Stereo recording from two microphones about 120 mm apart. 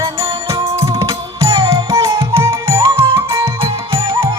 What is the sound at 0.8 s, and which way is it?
Music, 25° right (ahead or behind).